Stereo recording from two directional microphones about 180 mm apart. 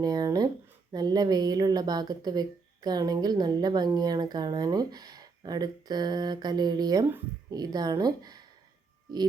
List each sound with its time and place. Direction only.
0.0 s speech: 20° right (ahead or behind)